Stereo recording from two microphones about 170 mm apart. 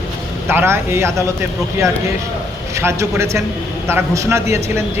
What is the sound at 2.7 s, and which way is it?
A man's voice, 15° right (ahead or behind).